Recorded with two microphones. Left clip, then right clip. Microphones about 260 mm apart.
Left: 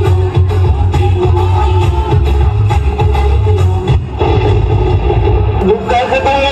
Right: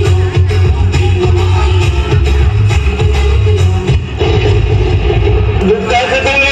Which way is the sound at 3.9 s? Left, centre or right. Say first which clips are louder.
Even; right.